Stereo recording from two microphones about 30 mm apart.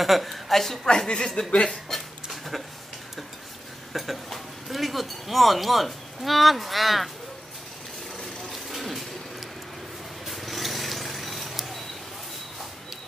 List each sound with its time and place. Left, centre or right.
0.0 s a woman's voice: centre
0.8 s speech: left
3.9 s speech: centre
8.5 s a sound: centre